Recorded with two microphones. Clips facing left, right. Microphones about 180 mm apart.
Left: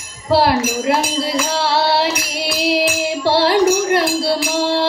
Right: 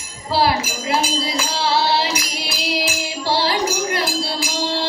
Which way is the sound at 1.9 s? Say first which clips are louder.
Left 3 dB; 60° left (ahead or behind).